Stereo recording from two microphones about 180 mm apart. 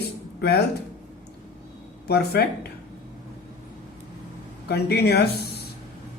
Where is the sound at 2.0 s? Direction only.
60° left (ahead or behind).